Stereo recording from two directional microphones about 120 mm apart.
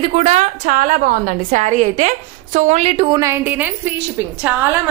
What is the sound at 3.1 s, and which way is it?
A woman's voice, 25° right (ahead or behind).